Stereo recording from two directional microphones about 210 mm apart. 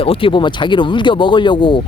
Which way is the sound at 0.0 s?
25° left (ahead or behind).